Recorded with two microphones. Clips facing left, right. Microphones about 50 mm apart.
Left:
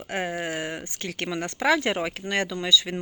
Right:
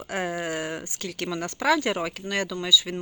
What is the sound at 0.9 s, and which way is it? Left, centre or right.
Speech, left.